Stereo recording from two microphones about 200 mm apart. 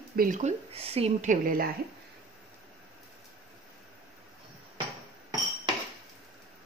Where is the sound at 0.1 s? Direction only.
45° right (ahead or behind).